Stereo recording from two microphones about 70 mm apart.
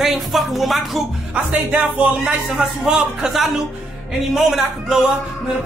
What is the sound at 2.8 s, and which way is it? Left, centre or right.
Speech, centre.